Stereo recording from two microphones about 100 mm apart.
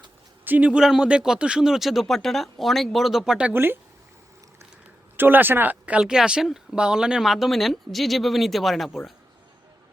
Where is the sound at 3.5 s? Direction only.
20° right (ahead or behind).